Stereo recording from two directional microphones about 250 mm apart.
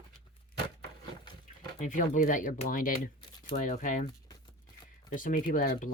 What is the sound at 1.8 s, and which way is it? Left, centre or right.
Speech, left.